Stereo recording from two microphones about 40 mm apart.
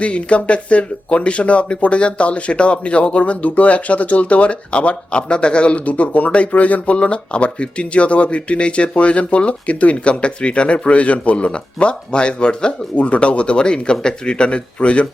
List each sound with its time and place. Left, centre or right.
0.0 s speech: left